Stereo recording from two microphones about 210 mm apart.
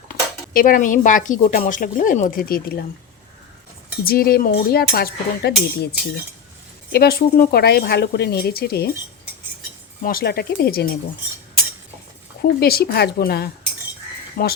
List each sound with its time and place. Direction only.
0.5 s speech: 40° left (ahead or behind)
4.0 s speech: 45° left (ahead or behind)
10.0 s speech: 45° left (ahead or behind)
12.4 s speech: 50° left (ahead or behind)